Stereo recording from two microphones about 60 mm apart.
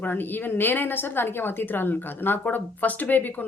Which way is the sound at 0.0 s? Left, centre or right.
Left.